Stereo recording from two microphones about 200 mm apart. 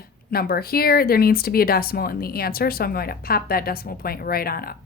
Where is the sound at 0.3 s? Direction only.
50° left (ahead or behind).